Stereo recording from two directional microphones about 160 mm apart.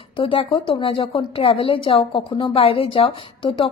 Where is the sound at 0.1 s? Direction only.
35° left (ahead or behind).